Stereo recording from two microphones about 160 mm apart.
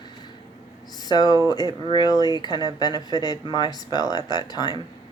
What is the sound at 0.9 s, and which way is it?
Speech, 25° left (ahead or behind).